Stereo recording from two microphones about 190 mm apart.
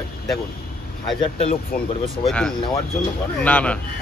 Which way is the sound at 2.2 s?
5° left (ahead or behind).